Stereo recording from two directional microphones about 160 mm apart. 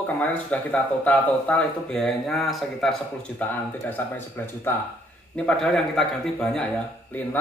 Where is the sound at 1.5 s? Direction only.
10° left (ahead or behind).